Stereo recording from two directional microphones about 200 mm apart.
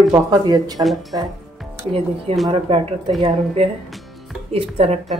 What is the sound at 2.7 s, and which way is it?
Speech, 25° right (ahead or behind).